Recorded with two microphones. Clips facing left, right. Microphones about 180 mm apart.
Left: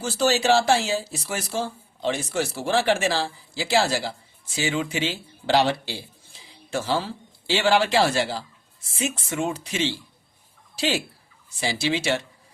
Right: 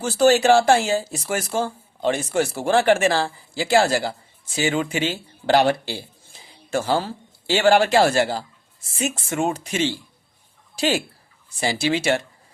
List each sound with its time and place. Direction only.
0.0 s speech: 55° right (ahead or behind)